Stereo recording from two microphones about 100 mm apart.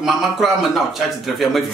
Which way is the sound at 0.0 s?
Centre (ahead or behind).